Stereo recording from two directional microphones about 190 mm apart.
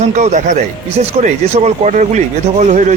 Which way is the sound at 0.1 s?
40° right (ahead or behind).